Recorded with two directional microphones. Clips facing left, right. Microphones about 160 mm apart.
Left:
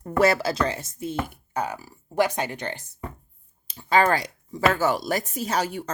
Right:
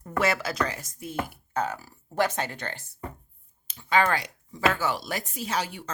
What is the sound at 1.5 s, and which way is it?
Speech, 15° left (ahead or behind).